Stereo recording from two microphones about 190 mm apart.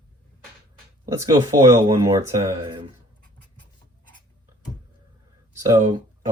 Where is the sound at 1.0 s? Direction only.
20° right (ahead or behind).